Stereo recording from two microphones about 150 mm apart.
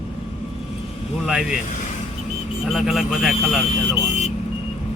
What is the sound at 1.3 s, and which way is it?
Speech, 5° right (ahead or behind).